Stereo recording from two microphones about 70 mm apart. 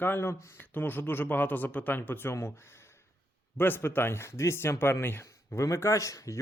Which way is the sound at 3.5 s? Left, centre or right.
Left.